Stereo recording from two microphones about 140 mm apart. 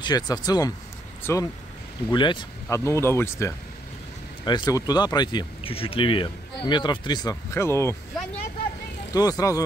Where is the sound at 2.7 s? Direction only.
20° left (ahead or behind).